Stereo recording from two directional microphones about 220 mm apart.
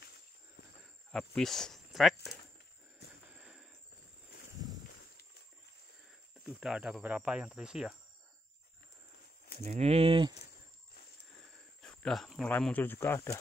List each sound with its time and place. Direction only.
1.1 s speech: centre (ahead or behind)
3.3 s a sound: 5° right (ahead or behind)
6.4 s speech: 5° right (ahead or behind)
9.6 s speech: 30° right (ahead or behind)
11.8 s speech: 5° left (ahead or behind)